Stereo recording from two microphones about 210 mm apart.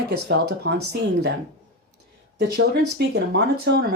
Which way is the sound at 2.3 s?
50° right (ahead or behind).